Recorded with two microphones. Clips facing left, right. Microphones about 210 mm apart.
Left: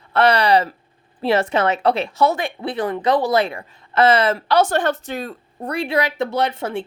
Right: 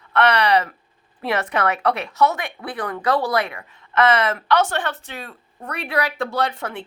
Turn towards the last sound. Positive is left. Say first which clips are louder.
# left 3 dB
turn(degrees=25)  # may be behind; listen again after turning